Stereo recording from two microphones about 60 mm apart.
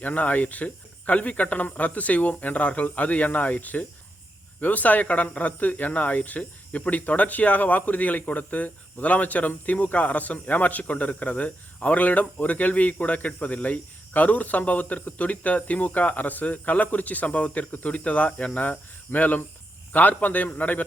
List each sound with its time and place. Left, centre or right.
0.0 s speech: left